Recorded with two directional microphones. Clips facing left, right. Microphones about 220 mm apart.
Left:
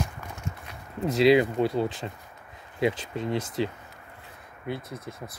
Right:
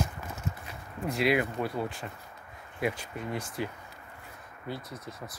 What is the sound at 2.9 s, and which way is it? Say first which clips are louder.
Speech: left 6 dB; 90° left.